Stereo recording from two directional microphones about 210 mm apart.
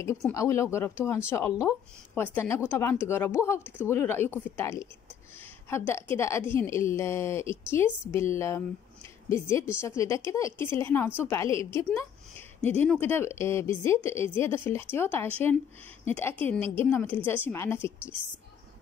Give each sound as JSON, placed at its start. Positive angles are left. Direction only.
{"t": 0.3, "sound": "a woman's voice", "side_deg": 15}
{"t": 16.5, "sound": "a woman's voice", "side_deg": -25}
{"t": 16.8, "sound": "a woman's voice", "side_deg": 10}